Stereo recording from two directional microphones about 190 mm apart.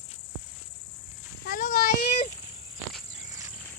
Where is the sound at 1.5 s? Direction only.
45° left (ahead or behind).